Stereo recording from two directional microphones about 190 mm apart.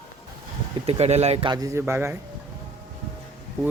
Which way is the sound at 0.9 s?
35° right (ahead or behind).